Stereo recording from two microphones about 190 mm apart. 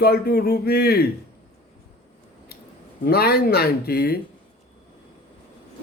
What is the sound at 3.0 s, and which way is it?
A man's voice, 55° left (ahead or behind).